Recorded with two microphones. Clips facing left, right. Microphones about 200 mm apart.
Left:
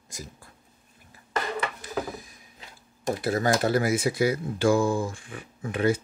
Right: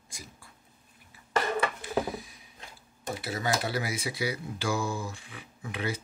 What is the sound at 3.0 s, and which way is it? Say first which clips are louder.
Speech: left 7 dB; 50° left (ahead or behind).